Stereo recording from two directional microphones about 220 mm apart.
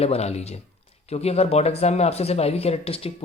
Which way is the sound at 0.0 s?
30° left (ahead or behind).